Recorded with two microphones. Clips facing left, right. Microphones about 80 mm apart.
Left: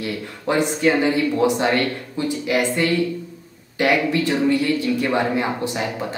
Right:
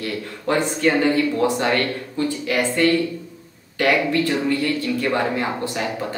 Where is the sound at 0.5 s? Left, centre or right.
Centre.